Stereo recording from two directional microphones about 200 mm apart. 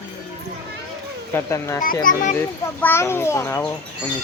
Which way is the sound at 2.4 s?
10° left (ahead or behind).